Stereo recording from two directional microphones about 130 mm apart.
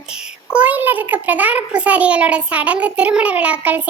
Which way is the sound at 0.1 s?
10° right (ahead or behind).